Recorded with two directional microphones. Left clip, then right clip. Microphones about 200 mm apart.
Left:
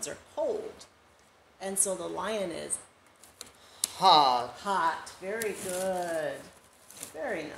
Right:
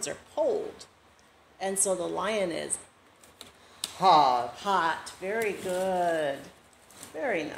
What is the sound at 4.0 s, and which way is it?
Speech, 10° left (ahead or behind).